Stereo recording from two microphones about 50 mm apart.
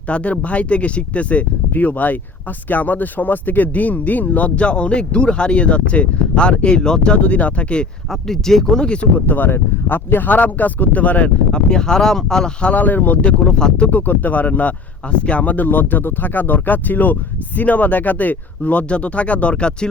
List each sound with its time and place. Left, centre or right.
0.1 s speech: left
8.3 s speech: centre
9.2 s speech: left
11.5 s speech: centre
12.6 s speech: left
13.5 s speech: centre
13.8 s speech: left